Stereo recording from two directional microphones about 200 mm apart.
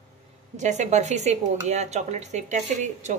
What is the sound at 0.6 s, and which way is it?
Speech, 35° right (ahead or behind).